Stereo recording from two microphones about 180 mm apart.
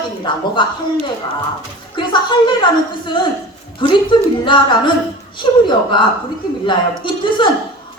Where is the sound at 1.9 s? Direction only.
25° left (ahead or behind).